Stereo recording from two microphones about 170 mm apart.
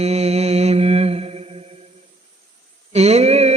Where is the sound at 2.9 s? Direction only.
40° right (ahead or behind).